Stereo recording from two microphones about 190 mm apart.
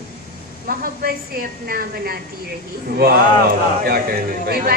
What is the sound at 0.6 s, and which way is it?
A woman's voice, 50° right (ahead or behind).